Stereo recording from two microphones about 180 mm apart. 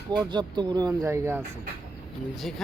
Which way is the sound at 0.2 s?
25° right (ahead or behind).